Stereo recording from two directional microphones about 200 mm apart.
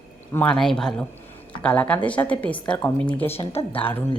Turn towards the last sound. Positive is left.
turn(degrees=30)  # may be behind; listen again after turning